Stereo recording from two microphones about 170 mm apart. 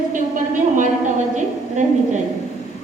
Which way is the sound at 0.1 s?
50° right (ahead or behind).